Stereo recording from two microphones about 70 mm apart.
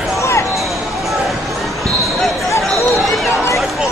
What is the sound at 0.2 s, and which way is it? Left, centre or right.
Basketball bounce, left.